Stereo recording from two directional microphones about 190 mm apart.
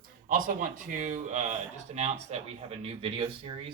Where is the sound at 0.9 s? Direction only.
40° right (ahead or behind).